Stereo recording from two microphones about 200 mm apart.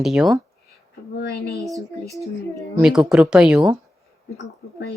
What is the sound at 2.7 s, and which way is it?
Speech, 5° right (ahead or behind).